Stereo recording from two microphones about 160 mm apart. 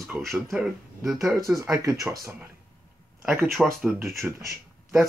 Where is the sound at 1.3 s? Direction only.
20° right (ahead or behind).